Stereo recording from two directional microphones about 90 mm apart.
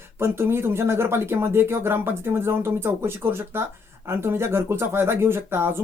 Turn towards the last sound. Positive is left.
turn(degrees=-25)  # may be behind; listen again after turning